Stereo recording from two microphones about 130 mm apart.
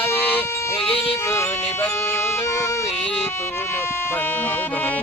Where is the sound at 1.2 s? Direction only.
20° left (ahead or behind).